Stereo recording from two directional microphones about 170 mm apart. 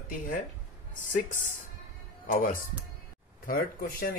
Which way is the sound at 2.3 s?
55° left (ahead or behind).